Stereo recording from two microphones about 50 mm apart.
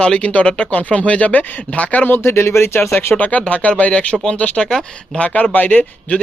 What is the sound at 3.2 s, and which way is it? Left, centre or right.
Speech, left.